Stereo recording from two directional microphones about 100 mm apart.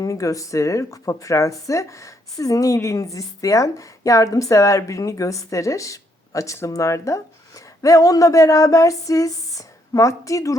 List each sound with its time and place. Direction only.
0.0 s speech: 35° left (ahead or behind)